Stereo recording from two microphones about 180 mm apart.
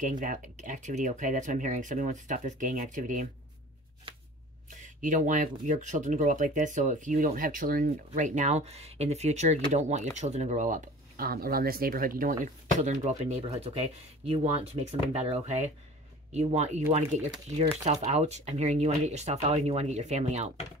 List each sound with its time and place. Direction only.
0.0 s speech: 45° right (ahead or behind)
4.6 s speech: 45° right (ahead or behind)
18.0 s speech: 40° right (ahead or behind)